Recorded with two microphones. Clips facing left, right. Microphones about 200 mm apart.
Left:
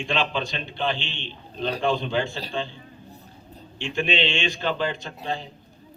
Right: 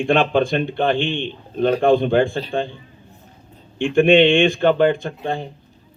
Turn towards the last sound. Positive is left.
turn(degrees=-55)  # may be behind; listen again after turning